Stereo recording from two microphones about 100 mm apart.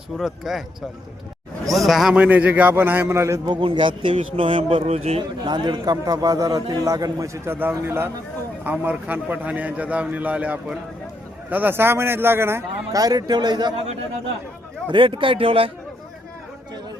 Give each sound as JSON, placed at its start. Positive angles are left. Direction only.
{"t": 0.2, "sound": "speech", "side_deg": -5}
{"t": 2.1, "sound": "a man's voice", "side_deg": -15}
{"t": 3.4, "sound": "a man's voice", "side_deg": -55}
{"t": 5.5, "sound": "a man's voice", "side_deg": -50}
{"t": 13.0, "sound": "a man's voice", "side_deg": -40}
{"t": 14.8, "sound": "a man's voice", "side_deg": -60}